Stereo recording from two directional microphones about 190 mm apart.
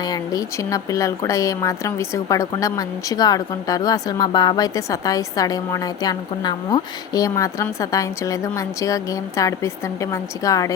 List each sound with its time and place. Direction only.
0.0 s a woman's voice: 20° left (ahead or behind)